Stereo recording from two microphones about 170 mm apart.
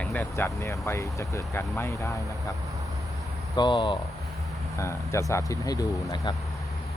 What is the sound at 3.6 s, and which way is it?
Speech, 30° left (ahead or behind).